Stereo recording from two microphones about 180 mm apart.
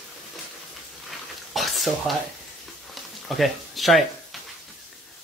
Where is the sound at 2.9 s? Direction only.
Centre (ahead or behind).